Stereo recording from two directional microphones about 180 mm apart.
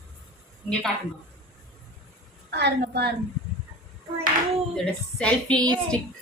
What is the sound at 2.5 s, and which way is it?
Speech, 70° right (ahead or behind).